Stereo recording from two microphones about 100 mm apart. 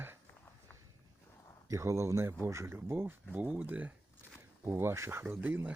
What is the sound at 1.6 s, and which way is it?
Speech, 30° right (ahead or behind).